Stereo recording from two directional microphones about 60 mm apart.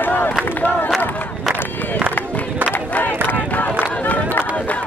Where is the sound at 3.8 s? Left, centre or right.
Left.